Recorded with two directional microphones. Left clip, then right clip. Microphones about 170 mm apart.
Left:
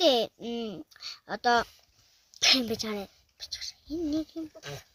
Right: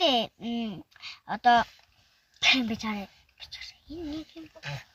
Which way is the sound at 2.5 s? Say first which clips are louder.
Right 1 dB; 20° left (ahead or behind).